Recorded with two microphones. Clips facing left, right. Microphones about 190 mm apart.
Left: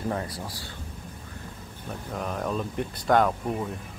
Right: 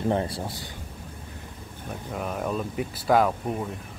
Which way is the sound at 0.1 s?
25° right (ahead or behind).